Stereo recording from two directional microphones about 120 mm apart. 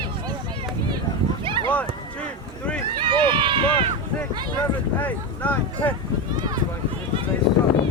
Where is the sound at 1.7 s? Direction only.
10° left (ahead or behind).